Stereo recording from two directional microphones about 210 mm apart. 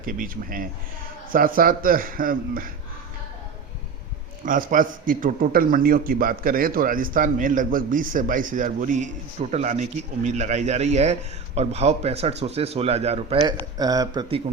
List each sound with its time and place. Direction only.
0.0 s a man's voice: 40° right (ahead or behind)
4.4 s a man's voice: 40° right (ahead or behind); by 14.4 s 25° right (ahead or behind)